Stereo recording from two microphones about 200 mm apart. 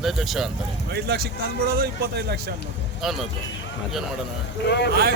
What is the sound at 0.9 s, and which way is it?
Speech, 55° right (ahead or behind).